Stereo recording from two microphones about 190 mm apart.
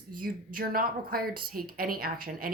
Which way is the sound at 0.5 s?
50° right (ahead or behind).